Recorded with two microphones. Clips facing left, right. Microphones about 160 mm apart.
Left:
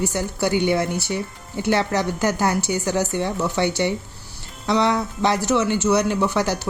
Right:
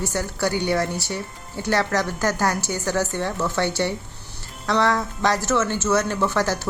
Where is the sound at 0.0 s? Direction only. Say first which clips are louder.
Left 2 dB; 15° left (ahead or behind).